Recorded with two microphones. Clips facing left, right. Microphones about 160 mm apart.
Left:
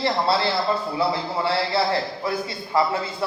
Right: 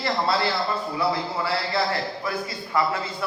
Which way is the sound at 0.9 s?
25° left (ahead or behind).